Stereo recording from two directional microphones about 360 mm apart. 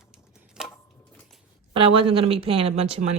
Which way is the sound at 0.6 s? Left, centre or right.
Centre.